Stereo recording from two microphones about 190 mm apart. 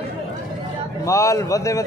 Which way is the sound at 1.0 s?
15° left (ahead or behind).